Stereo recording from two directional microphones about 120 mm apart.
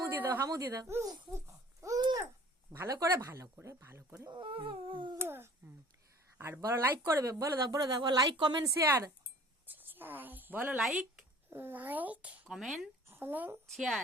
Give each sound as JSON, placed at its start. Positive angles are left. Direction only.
{"t": 0.2, "sound": "speech", "side_deg": -20}
{"t": 0.4, "sound": "speech", "side_deg": -30}
{"t": 1.3, "sound": "babbling", "side_deg": -25}
{"t": 2.7, "sound": "speech", "side_deg": -25}
{"t": 4.3, "sound": "a sound", "side_deg": -45}
{"t": 5.1, "sound": "speech", "side_deg": -20}
{"t": 9.6, "sound": "speech", "side_deg": -15}
{"t": 10.8, "sound": "speech", "side_deg": -5}
{"t": 11.5, "sound": "speech", "side_deg": -15}
{"t": 13.1, "sound": "speech", "side_deg": -20}
{"t": 13.7, "sound": "a woman's voice", "side_deg": 0}